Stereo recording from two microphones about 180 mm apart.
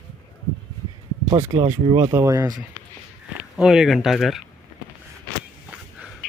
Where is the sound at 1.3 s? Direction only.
35° right (ahead or behind).